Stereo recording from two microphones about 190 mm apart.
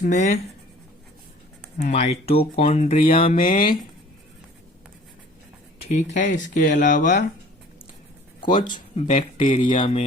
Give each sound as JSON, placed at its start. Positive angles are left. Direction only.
{"t": 0.0, "sound": "speech", "side_deg": 40}
{"t": 1.8, "sound": "speech", "side_deg": 35}
{"t": 3.0, "sound": "speech", "side_deg": 50}
{"t": 5.8, "sound": "speech", "side_deg": 40}
{"t": 8.4, "sound": "speech", "side_deg": 25}